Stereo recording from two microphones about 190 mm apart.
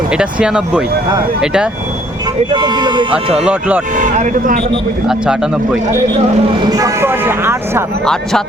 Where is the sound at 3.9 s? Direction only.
40° right (ahead or behind).